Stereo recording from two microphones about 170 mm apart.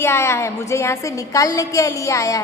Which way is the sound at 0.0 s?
15° left (ahead or behind).